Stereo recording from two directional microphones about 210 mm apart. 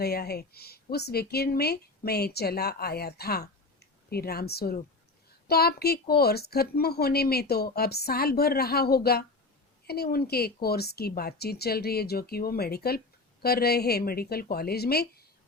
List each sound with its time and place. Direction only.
0.0 s speech: 50° left (ahead or behind)